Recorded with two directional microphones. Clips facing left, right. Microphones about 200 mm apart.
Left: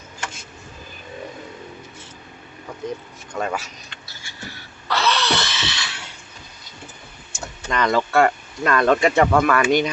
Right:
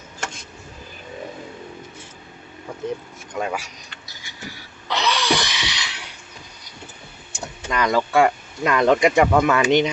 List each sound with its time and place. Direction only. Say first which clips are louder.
3.3 s speech: even; 10° right (ahead or behind)
4.1 s a sound: right 1 dB; 15° right (ahead or behind)
7.3 s speech: even; 10° right (ahead or behind)